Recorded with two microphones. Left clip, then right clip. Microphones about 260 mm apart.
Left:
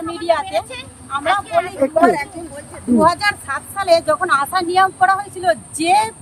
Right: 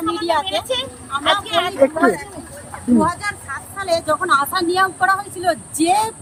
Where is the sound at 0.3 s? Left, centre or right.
Centre.